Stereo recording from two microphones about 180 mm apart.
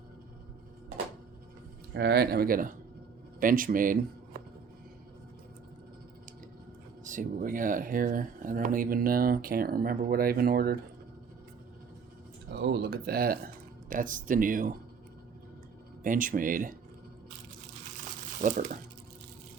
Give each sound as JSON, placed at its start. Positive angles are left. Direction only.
{"t": 1.9, "sound": "speech", "side_deg": -75}
{"t": 7.0, "sound": "speech", "side_deg": -45}
{"t": 12.5, "sound": "speech", "side_deg": -60}
{"t": 16.0, "sound": "speech", "side_deg": -50}
{"t": 18.3, "sound": "speech", "side_deg": -45}